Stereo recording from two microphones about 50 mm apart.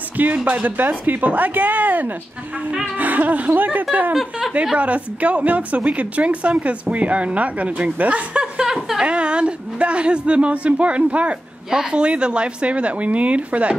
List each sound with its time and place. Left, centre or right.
0.5 s a woman's voice: right
8.6 s a sound: centre
9.0 s a woman's voice: right